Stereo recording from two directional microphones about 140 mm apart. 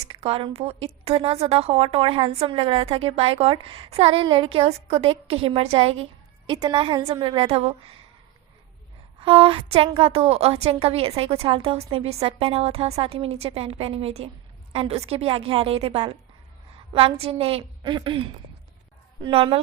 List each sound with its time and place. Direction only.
0.1 s a woman's voice: 45° right (ahead or behind)
6.5 s a woman's voice: 30° right (ahead or behind)
9.2 s a woman's voice: 40° right (ahead or behind)